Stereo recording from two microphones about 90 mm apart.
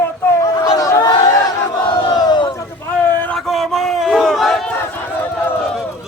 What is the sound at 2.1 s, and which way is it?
Battle cry, 55° left (ahead or behind).